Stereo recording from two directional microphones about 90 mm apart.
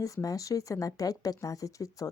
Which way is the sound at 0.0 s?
40° left (ahead or behind).